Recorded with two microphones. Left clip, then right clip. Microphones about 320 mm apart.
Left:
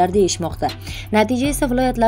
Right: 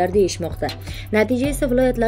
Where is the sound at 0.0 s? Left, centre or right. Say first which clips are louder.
Left 2 dB; left.